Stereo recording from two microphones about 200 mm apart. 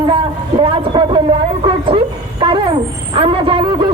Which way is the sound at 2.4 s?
25° right (ahead or behind).